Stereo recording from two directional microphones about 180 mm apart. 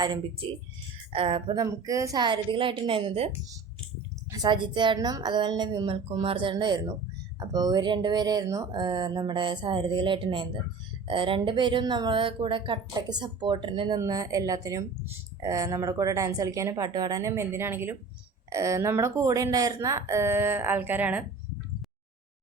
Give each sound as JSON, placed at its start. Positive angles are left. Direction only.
{"t": 0.0, "sound": "speech", "side_deg": -25}
{"t": 1.6, "sound": "speech", "side_deg": -20}